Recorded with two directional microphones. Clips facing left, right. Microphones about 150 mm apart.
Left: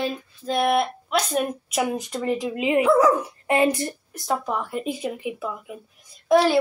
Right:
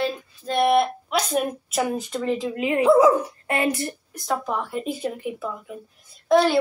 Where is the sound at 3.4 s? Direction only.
25° left (ahead or behind).